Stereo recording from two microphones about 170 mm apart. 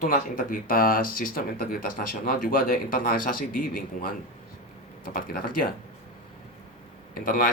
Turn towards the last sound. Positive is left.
turn(degrees=55)  # may be behind; listen again after turning